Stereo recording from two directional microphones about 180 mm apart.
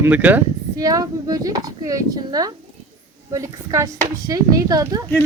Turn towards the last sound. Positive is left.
turn(degrees=-20)  # may be behind; listen again after turning